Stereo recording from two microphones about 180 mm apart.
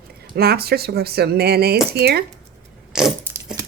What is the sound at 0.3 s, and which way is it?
Speech, 60° right (ahead or behind).